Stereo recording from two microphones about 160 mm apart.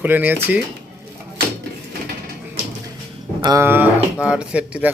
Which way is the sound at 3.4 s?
20° right (ahead or behind).